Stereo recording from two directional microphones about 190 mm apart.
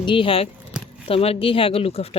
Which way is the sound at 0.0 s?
25° left (ahead or behind).